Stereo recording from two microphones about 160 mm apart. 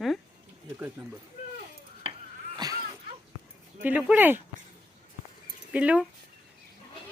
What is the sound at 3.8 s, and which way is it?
Speech, 5° right (ahead or behind).